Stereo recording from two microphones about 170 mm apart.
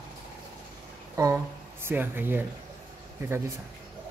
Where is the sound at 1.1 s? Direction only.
15° right (ahead or behind).